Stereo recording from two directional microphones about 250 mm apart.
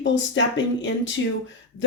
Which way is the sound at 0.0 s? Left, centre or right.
Left.